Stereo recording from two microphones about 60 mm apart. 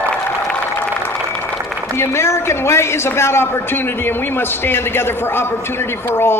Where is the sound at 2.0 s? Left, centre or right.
Left.